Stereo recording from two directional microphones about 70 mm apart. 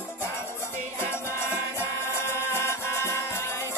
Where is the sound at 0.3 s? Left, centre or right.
Left.